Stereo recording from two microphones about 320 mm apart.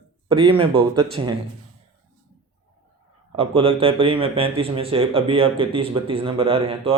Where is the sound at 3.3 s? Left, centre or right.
Centre.